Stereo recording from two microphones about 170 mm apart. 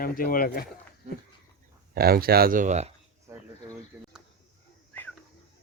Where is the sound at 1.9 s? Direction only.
65° right (ahead or behind); by 2.9 s 45° right (ahead or behind).